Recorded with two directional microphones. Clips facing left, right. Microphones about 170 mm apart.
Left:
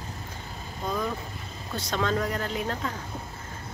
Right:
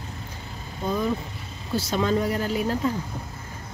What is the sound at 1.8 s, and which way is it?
Speech, 10° right (ahead or behind).